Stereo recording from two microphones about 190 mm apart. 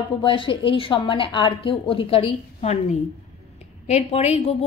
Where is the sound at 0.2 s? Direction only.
25° left (ahead or behind).